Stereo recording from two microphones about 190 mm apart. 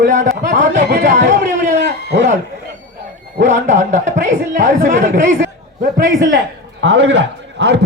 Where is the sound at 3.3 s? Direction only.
40° right (ahead or behind).